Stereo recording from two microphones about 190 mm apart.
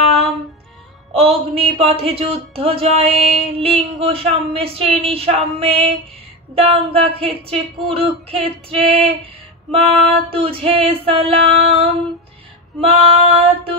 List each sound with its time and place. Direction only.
1.1 s speech: 30° right (ahead or behind)
9.7 s female singing: 30° right (ahead or behind)